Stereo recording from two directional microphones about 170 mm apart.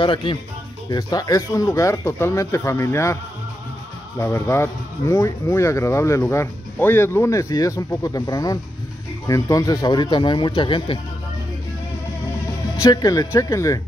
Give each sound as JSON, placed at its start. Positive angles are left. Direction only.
{"t": 0.0, "sound": "speech", "side_deg": 30}
{"t": 4.2, "sound": "speech", "side_deg": 15}
{"t": 12.8, "sound": "speech", "side_deg": 20}